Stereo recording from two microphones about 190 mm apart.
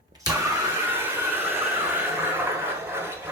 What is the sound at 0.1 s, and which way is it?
Vehicle, 20° right (ahead or behind).